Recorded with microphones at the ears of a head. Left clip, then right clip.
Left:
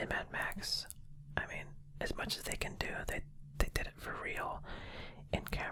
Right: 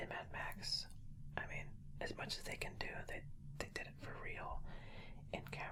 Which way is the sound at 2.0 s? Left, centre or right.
Left.